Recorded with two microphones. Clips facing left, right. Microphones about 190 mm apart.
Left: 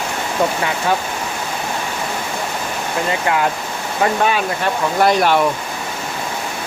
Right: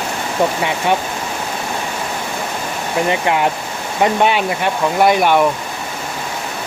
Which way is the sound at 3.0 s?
20° right (ahead or behind).